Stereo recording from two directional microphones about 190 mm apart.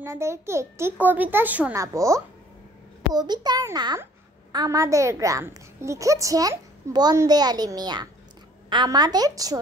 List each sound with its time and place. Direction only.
0.0 s a child's voice: 15° right (ahead or behind)